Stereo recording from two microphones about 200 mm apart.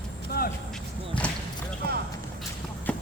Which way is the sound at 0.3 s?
50° left (ahead or behind).